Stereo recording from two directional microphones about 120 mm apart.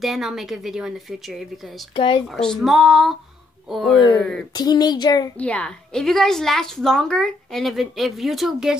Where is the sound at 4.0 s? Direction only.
35° left (ahead or behind).